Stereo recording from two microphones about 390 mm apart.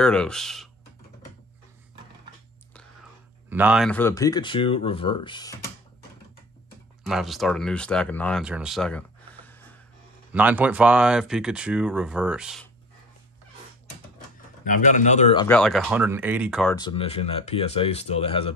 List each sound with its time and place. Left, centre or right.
0.0 s speech: centre
3.4 s speech: centre
7.0 s speech: centre
14.6 s a man's voice: centre
15.4 s speech: centre
16.7 s speech: centre